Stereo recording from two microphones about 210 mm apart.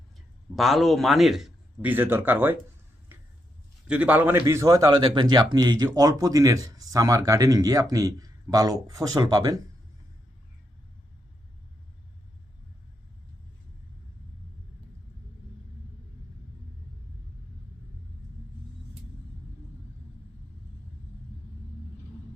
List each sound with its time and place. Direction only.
0.5 s a man's voice: centre (ahead or behind)
3.1 s a sound: 10° right (ahead or behind)
3.8 s a man's voice: 5° right (ahead or behind)